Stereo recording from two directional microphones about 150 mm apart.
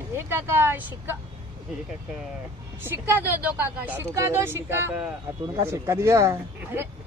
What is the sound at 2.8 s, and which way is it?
Speech, 15° right (ahead or behind).